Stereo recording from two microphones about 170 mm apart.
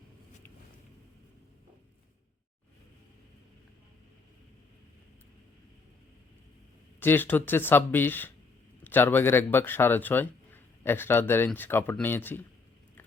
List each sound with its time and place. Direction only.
7.0 s speech: 10° left (ahead or behind)